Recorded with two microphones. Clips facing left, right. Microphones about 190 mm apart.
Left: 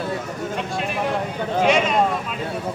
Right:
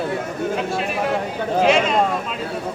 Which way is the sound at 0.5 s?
Centre (ahead or behind).